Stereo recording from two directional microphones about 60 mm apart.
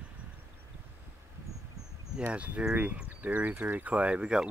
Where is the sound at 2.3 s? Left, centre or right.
Right.